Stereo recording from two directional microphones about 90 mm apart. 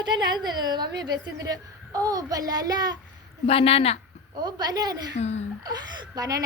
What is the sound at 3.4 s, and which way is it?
Speech, 90° left.